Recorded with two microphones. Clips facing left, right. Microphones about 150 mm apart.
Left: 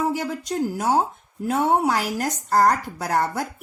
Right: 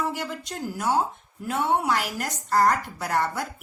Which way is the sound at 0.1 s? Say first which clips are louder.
Left 6 dB; 45° left (ahead or behind).